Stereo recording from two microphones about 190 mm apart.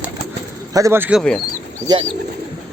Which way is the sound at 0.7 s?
15° right (ahead or behind).